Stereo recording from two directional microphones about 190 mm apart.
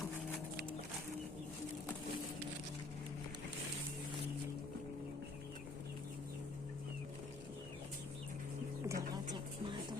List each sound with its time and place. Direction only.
8.9 s bird: 20° right (ahead or behind)